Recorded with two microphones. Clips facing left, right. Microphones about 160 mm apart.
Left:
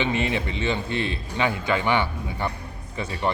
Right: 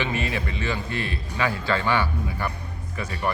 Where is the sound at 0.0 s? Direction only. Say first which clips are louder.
Left 3 dB; 20° left (ahead or behind).